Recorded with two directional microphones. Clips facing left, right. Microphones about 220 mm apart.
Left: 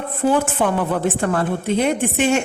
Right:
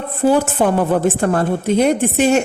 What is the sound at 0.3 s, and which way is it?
A woman's voice, 40° right (ahead or behind).